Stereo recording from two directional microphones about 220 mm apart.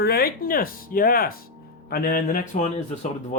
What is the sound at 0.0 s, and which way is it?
Speech, 45° left (ahead or behind).